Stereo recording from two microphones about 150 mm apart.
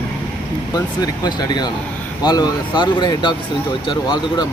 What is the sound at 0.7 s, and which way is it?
Speech, 25° left (ahead or behind).